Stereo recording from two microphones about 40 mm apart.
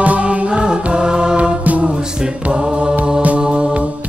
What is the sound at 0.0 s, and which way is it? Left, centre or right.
Music, right.